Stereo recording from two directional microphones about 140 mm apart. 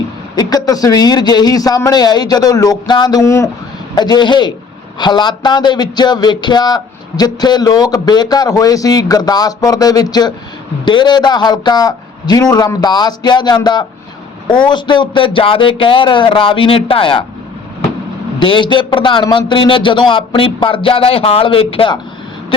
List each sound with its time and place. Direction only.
0.3 s a man's voice: 25° left (ahead or behind)
18.3 s a man's voice: 35° left (ahead or behind)